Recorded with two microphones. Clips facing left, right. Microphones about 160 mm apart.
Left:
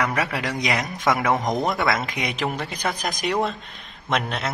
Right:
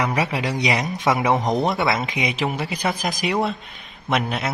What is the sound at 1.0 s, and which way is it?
Speech, 20° right (ahead or behind).